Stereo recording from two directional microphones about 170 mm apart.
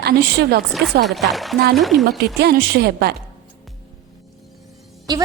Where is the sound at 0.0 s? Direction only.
65° right (ahead or behind).